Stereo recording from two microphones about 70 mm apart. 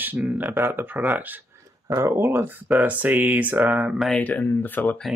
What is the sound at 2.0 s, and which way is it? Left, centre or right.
Speech, right.